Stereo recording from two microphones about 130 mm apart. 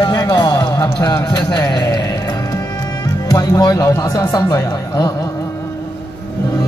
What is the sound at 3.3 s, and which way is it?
Speech, 30° left (ahead or behind).